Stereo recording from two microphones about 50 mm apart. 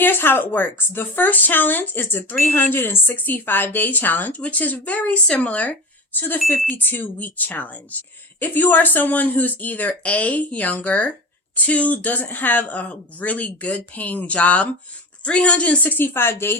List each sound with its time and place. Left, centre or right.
0.0 s a woman's voice: left
3.2 s speech: left
6.1 s speech: left